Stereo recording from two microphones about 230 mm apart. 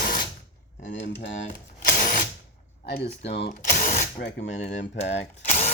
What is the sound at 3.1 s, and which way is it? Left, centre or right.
Speech, left.